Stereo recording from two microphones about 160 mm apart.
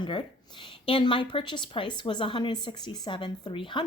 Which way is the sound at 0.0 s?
30° left (ahead or behind).